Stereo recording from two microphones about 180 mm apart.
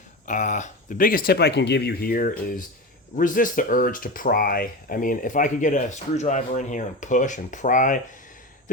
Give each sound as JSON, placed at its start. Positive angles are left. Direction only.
{"t": 0.3, "sound": "speech", "side_deg": 45}